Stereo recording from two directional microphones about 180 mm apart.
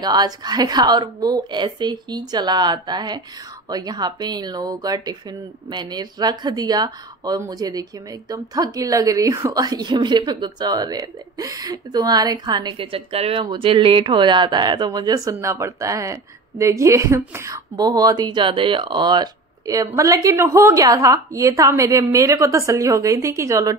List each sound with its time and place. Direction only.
0.0 s speech: 20° right (ahead or behind)